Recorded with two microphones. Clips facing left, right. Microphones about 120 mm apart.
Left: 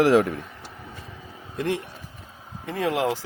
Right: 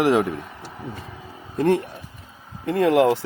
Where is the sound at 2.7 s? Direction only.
60° right (ahead or behind).